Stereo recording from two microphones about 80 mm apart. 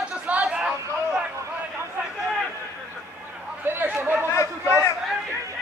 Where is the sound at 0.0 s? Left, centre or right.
Centre.